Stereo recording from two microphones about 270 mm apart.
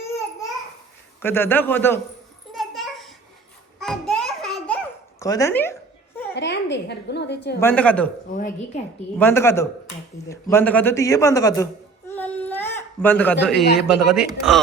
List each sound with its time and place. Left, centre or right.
1.2 s a man's voice: centre
2.5 s a sound: centre
5.2 s a man's voice: centre
6.3 s a woman's voice: left
7.6 s speech: centre
8.4 s speech: left
9.1 s a man's voice: centre